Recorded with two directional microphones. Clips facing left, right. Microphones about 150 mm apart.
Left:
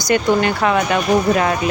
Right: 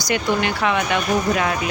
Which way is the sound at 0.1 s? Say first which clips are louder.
Left 5 dB; 45° left (ahead or behind).